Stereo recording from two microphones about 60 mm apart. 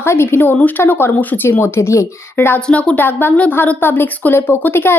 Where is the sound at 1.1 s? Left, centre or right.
Left.